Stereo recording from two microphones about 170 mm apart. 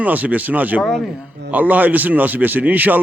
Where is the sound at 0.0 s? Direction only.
10° right (ahead or behind).